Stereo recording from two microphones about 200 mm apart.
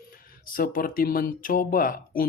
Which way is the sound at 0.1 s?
45° left (ahead or behind).